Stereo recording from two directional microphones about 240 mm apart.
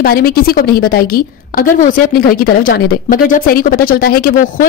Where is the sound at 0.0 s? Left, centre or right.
Left.